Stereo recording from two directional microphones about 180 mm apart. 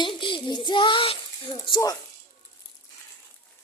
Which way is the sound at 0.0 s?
25° left (ahead or behind).